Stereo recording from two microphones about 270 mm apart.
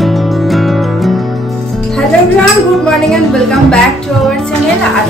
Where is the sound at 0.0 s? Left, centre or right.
Centre.